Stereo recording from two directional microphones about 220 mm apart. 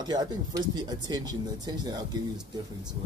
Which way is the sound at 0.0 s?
20° right (ahead or behind).